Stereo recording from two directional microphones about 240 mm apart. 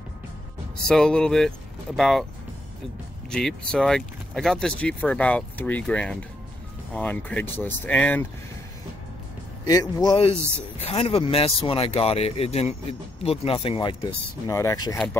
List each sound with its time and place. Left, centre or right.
0.8 s speech: centre
3.3 s speech: centre
9.7 s speech: centre